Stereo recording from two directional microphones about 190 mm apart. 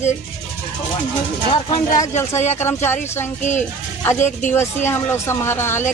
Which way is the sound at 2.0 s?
15° left (ahead or behind).